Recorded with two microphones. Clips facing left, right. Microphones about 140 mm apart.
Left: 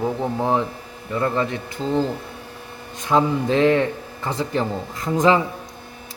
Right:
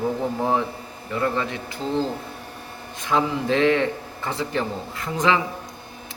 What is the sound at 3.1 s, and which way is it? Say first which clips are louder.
Speech: left 3 dB; 35° left (ahead or behind).